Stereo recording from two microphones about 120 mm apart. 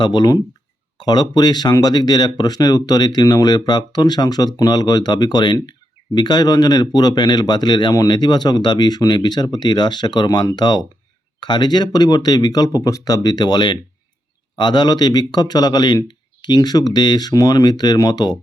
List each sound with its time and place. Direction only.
0.0 s speech: 35° left (ahead or behind)